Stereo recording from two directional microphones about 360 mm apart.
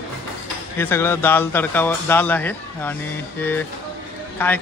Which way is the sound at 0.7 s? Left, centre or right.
Centre.